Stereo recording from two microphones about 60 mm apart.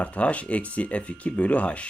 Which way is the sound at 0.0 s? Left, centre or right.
Left.